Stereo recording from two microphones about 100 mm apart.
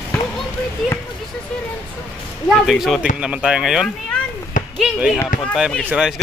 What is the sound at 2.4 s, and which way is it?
Speech, centre (ahead or behind).